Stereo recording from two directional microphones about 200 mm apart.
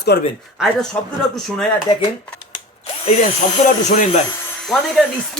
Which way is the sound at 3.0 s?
40° left (ahead or behind).